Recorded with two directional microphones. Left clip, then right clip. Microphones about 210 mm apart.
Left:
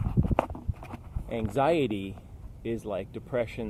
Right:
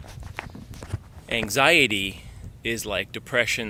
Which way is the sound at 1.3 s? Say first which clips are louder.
Right 7 dB; 10° right (ahead or behind).